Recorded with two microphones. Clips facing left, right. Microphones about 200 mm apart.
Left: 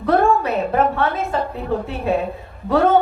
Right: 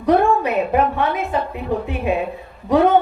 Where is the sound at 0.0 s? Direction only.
15° right (ahead or behind).